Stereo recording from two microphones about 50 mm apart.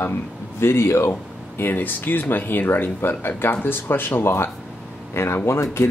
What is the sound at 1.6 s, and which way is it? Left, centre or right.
Speech, left.